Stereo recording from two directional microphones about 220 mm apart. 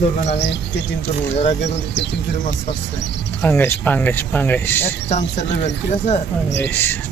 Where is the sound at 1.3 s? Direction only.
30° left (ahead or behind).